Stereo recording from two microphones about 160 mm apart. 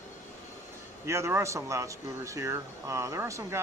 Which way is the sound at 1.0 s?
15° right (ahead or behind).